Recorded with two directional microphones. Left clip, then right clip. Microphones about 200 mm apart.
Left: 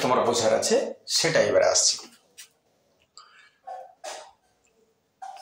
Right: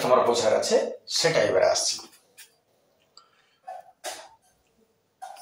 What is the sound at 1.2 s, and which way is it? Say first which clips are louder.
Speech: left 1 dB; 30° left (ahead or behind).